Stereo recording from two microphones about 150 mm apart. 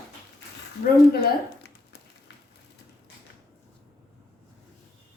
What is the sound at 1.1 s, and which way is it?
Speech, 90° left.